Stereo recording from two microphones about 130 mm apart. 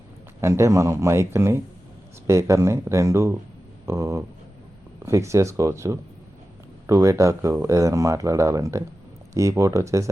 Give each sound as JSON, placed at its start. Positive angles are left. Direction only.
{"t": 0.4, "sound": "speech", "side_deg": -20}